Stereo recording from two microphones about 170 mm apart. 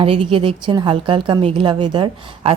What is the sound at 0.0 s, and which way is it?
A woman's voice, 30° right (ahead or behind).